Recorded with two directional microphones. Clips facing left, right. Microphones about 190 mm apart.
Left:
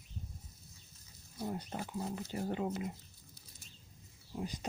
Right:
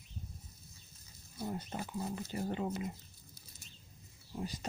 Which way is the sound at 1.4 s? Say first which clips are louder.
Even; 10° left (ahead or behind).